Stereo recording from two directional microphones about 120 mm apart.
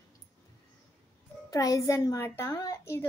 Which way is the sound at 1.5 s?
30° left (ahead or behind).